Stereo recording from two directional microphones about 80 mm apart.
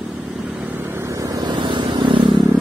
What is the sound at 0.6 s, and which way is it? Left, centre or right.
Vehicle, right.